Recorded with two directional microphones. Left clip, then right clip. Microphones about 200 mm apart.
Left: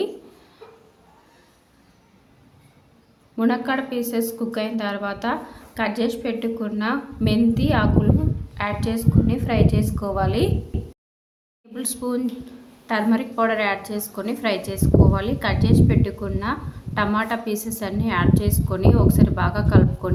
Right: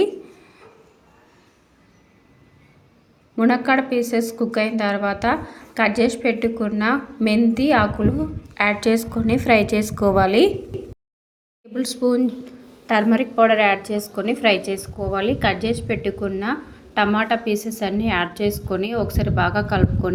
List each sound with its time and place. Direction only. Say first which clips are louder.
3.3 s a woman's voice: right 5 dB; 20° right (ahead or behind)
11.7 s a woman's voice: right 7 dB; 15° right (ahead or behind)